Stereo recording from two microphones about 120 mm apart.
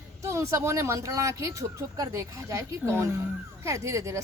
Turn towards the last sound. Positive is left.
turn(degrees=-25)  # may be behind; listen again after turning